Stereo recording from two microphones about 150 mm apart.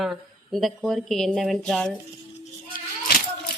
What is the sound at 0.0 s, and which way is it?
Speech, centre (ahead or behind).